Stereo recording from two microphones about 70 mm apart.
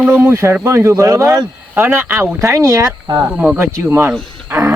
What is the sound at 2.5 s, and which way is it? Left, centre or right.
Speech, right.